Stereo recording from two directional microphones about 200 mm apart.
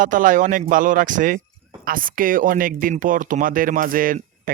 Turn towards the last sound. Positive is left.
turn(degrees=-45)  # may be behind; listen again after turning